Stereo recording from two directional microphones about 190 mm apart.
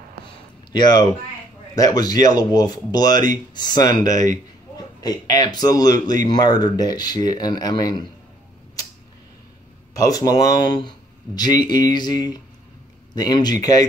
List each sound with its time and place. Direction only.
0.7 s speech: 20° left (ahead or behind)
9.9 s speech: 20° left (ahead or behind)